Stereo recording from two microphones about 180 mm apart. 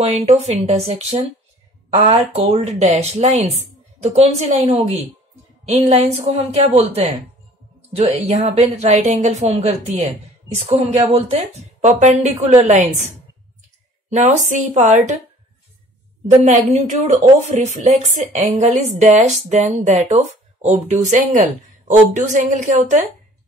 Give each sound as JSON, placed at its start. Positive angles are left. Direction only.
{"t": 0.0, "sound": "speech", "side_deg": -35}
{"t": 8.0, "sound": "speech", "side_deg": -35}
{"t": 14.1, "sound": "speech", "side_deg": -40}
{"t": 16.3, "sound": "speech", "side_deg": -40}